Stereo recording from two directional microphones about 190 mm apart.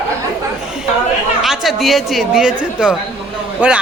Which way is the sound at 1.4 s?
Centre (ahead or behind).